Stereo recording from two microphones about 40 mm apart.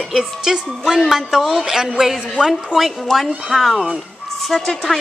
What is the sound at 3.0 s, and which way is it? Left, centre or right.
A woman's voice, centre.